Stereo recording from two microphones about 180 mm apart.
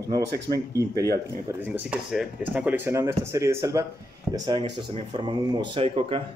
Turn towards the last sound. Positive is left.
turn(degrees=-30)  # may be behind; listen again after turning